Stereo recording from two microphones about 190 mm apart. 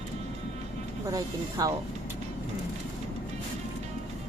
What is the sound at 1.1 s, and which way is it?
Speech, 20° right (ahead or behind).